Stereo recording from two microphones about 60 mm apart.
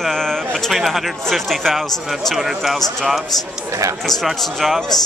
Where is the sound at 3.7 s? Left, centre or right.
Right.